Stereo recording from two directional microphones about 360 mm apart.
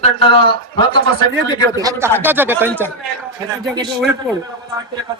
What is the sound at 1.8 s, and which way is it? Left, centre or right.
Speech, centre.